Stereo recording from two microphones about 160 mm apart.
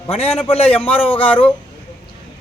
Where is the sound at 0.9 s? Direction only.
10° left (ahead or behind).